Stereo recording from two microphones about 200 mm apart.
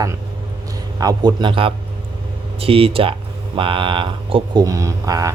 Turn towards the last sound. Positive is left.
turn(degrees=-15)  # may be behind; listen again after turning